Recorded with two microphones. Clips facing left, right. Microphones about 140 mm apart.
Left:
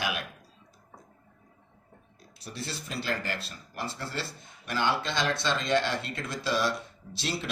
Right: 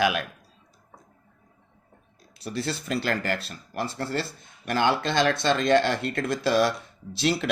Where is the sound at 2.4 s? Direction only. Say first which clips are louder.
Right 9 dB; 80° right; by 6.7 s 55° right (ahead or behind).